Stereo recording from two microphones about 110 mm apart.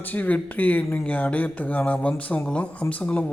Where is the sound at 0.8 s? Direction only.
25° left (ahead or behind).